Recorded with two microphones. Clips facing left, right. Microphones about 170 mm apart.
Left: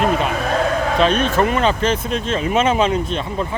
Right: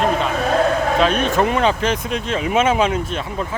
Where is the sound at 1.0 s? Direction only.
10° right (ahead or behind).